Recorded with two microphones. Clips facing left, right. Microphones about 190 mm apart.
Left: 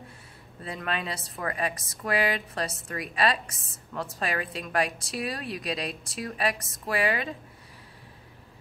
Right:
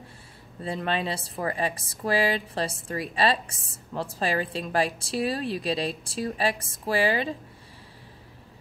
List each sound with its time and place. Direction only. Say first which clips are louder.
0.7 s a woman's voice: right 4 dB; 30° right (ahead or behind)